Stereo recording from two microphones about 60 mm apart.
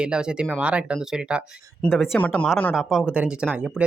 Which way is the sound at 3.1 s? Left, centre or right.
Centre.